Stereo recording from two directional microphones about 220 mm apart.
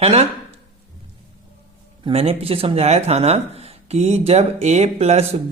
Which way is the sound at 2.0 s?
25° right (ahead or behind).